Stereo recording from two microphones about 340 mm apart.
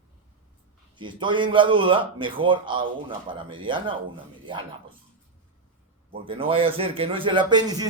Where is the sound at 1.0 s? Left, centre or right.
Centre.